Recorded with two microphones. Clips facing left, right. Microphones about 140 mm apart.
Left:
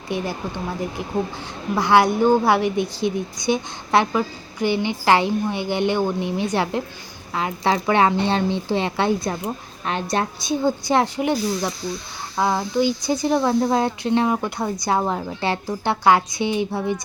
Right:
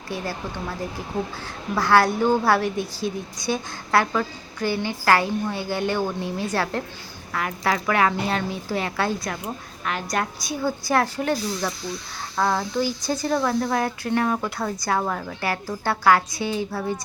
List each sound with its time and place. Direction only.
0.1 s a woman's voice: 20° left (ahead or behind)